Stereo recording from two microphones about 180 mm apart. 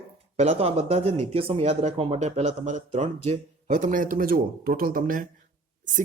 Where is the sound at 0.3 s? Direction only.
35° right (ahead or behind).